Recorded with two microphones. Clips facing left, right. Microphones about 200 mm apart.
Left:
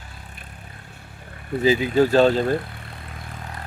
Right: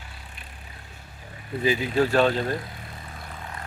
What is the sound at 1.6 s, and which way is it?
Speech, 25° left (ahead or behind).